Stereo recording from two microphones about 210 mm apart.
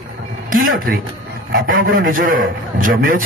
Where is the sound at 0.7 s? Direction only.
45° right (ahead or behind).